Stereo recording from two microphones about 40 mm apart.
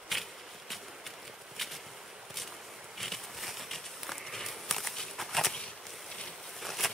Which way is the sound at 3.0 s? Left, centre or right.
Centre.